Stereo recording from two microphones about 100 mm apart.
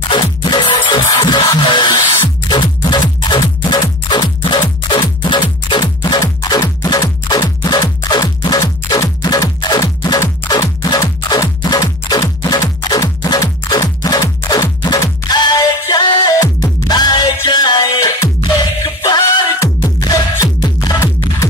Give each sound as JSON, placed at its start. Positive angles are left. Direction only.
{"t": 0.1, "sound": "music", "side_deg": 50}
{"t": 19.6, "sound": "music", "side_deg": 35}